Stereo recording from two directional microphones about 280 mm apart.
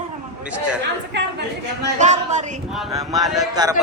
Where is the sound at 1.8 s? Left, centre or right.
Right.